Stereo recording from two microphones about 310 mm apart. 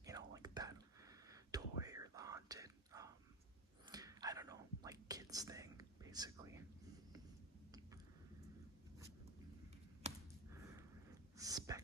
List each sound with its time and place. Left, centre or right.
0.0 s whispering: centre
10.0 s a sound: centre
11.3 s dog: centre